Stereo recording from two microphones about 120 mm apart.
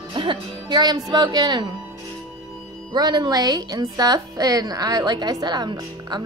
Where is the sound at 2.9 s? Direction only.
35° right (ahead or behind).